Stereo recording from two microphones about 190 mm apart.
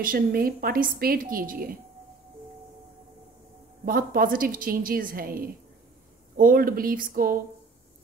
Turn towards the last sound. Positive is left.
turn(degrees=-50)  # may be behind; listen again after turning